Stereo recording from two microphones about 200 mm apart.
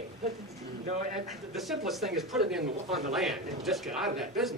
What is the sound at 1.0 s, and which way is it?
Speech, 40° right (ahead or behind).